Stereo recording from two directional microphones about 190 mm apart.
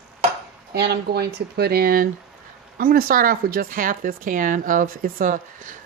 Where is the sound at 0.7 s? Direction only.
60° right (ahead or behind).